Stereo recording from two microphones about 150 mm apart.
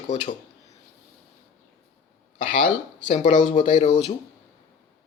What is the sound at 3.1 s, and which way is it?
Speech, 50° left (ahead or behind).